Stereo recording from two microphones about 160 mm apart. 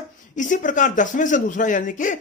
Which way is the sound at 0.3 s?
55° left (ahead or behind).